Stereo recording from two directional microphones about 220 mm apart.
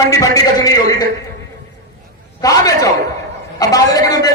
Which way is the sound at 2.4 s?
15° left (ahead or behind).